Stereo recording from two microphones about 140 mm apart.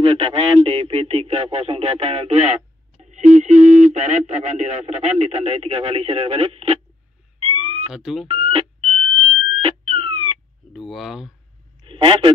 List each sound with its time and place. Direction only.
0.0 s speech: 40° right (ahead or behind)
7.4 s a sound: 45° right (ahead or behind)
7.9 s speech: 5° right (ahead or behind)
8.3 s alarm: 40° right (ahead or behind)
10.7 s speech: centre (ahead or behind)
11.8 s a sound: 35° right (ahead or behind)